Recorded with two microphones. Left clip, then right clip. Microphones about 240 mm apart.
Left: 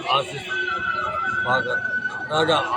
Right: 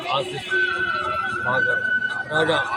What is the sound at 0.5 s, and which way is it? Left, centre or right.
Speech, right.